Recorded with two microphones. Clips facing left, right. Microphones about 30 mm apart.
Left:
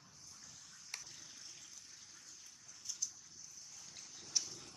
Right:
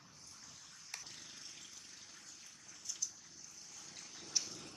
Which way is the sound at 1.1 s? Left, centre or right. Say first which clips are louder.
Right 2 dB; right.